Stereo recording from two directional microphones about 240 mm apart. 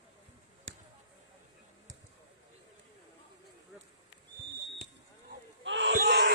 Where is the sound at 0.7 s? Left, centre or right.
Right.